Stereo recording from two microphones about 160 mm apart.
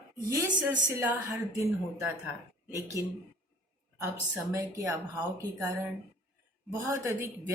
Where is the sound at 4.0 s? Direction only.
15° right (ahead or behind).